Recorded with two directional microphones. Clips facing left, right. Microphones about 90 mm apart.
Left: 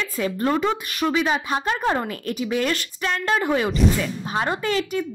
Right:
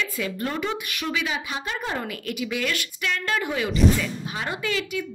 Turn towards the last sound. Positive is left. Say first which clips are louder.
# left 4 dB
turn(degrees=40)  # may be behind; listen again after turning